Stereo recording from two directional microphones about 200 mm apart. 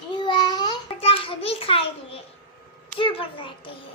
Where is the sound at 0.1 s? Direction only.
20° left (ahead or behind).